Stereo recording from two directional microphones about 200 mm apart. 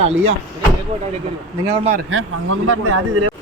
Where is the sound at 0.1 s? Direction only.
80° right.